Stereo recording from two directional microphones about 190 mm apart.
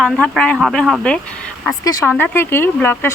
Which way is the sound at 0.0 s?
5° left (ahead or behind).